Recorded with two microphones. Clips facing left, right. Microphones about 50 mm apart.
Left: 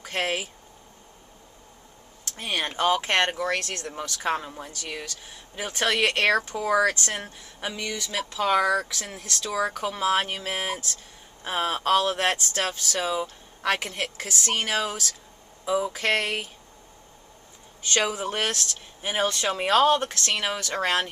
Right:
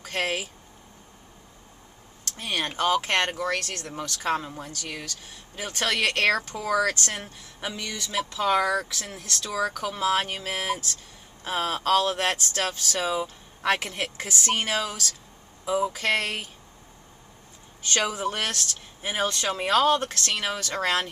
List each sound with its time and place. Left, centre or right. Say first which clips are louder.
0.0 s speech: even; centre
2.5 s speech: left 1 dB; centre
4.4 s speech: right 1 dB; centre
14.8 s speech: left 2 dB; centre
15.7 s speech: even; centre
16.1 s speech: left 3 dB; centre
17.9 s speech: left 1 dB; centre